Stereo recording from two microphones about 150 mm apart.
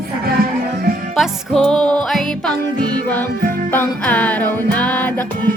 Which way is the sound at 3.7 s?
10° left (ahead or behind).